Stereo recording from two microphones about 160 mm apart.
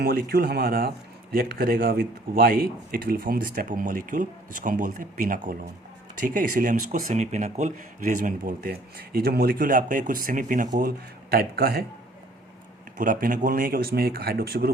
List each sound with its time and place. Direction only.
0.0 s speech: 70° right (ahead or behind)
13.0 s speech: 60° right (ahead or behind)